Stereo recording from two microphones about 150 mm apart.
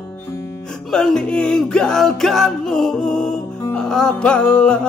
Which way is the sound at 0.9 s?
5° left (ahead or behind).